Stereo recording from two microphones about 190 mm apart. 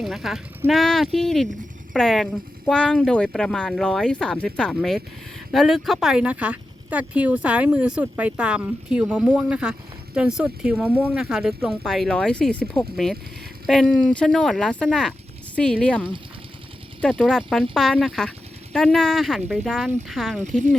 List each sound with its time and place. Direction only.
0.0 s speech: centre (ahead or behind)